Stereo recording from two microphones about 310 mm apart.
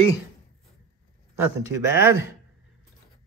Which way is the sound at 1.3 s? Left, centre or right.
Centre.